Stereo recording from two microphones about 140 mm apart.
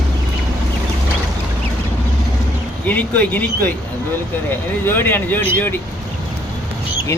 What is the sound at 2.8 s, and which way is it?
Speech, 10° left (ahead or behind).